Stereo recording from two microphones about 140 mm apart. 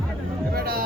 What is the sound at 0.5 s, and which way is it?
Music, 90° right.